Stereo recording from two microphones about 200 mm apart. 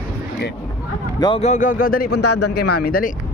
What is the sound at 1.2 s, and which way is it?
Speech, 30° left (ahead or behind).